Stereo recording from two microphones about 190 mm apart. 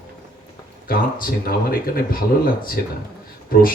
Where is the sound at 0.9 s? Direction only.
50° left (ahead or behind).